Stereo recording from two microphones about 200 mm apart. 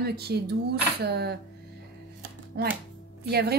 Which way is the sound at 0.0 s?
50° right (ahead or behind).